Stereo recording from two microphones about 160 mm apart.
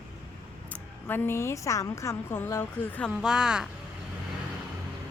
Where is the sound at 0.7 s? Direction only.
15° left (ahead or behind).